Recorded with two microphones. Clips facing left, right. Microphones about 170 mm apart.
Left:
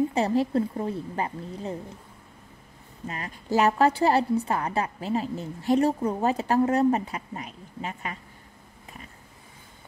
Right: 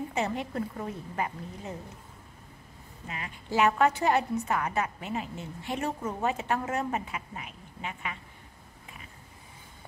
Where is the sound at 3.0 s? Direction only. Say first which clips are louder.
Left 5 dB; 40° left (ahead or behind).